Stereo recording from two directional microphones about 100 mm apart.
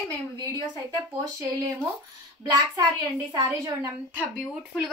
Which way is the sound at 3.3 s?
30° right (ahead or behind).